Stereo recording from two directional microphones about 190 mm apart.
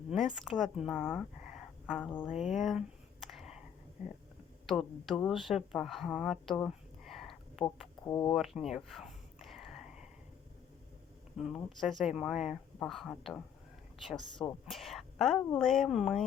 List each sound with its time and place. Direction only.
0.1 s speech: centre (ahead or behind)
2.2 s a sound: 5° right (ahead or behind)
4.6 s speech: centre (ahead or behind)
8.0 s speech: 15° left (ahead or behind)
8.3 s a sound: centre (ahead or behind)
11.3 s speech: centre (ahead or behind)
14.4 s speech: centre (ahead or behind)